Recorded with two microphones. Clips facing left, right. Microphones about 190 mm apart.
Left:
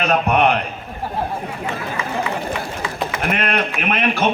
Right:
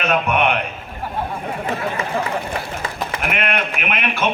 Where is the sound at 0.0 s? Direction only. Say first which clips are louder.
Left 2 dB; 35° left (ahead or behind).